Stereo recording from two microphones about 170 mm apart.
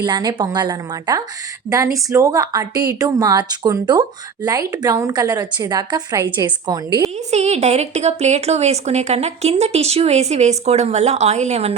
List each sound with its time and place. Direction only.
0.0 s a woman's voice: 25° right (ahead or behind)
7.3 s a woman's voice: 40° right (ahead or behind)